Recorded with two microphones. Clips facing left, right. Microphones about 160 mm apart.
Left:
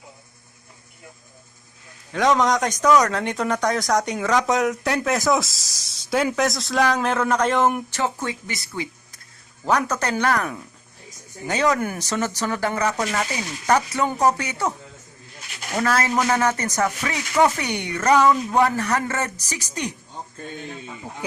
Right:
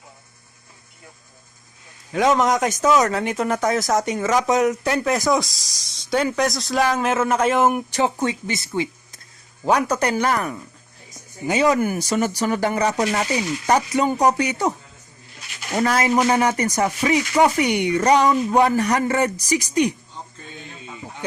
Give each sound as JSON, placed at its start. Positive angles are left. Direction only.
{"t": 2.1, "sound": "speech", "side_deg": -5}
{"t": 9.6, "sound": "speech", "side_deg": -10}
{"t": 13.0, "sound": "speech", "side_deg": -30}
{"t": 13.7, "sound": "speech", "side_deg": -15}
{"t": 15.8, "sound": "speech", "side_deg": -15}